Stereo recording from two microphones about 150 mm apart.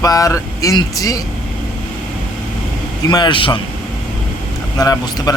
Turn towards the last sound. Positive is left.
turn(degrees=25)  # may be behind; listen again after turning